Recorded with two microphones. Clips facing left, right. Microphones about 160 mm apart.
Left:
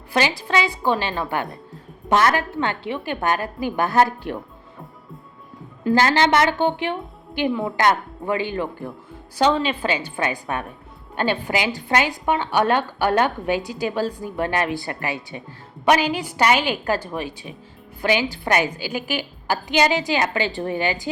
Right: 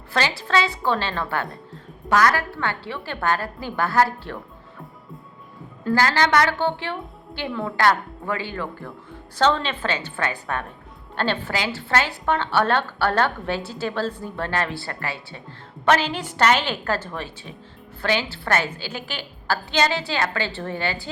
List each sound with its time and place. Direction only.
0.1 s a woman's voice: 15° left (ahead or behind)
5.8 s a woman's voice: 20° left (ahead or behind)